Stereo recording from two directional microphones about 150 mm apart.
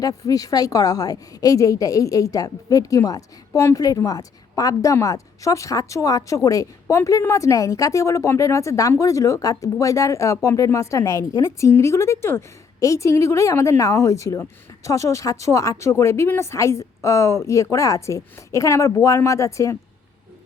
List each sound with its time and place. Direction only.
0.0 s a woman's voice: 25° left (ahead or behind)